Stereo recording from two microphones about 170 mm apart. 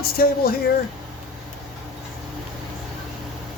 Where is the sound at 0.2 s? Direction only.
60° left (ahead or behind).